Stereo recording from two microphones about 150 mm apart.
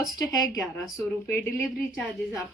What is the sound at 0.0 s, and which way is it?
A woman's voice, 25° left (ahead or behind).